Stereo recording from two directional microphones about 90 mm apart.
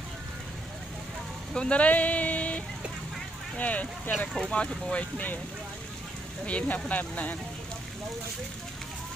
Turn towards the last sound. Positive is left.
turn(degrees=15)  # may be behind; listen again after turning